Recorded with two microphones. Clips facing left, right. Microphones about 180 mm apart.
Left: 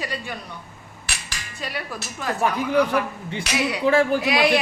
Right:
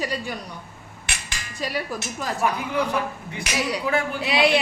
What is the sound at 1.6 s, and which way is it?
Speech, 40° right (ahead or behind).